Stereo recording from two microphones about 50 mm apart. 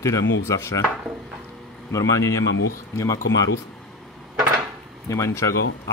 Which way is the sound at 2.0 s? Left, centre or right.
Left.